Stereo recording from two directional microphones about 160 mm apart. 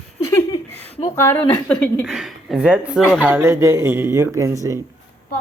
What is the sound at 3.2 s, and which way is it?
Speech, 15° right (ahead or behind).